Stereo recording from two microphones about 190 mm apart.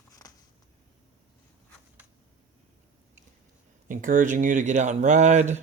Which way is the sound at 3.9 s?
45° right (ahead or behind).